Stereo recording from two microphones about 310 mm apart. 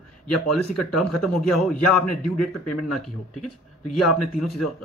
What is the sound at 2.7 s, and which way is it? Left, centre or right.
Speech, left.